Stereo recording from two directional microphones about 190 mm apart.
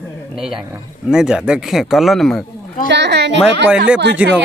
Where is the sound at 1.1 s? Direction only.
5° right (ahead or behind).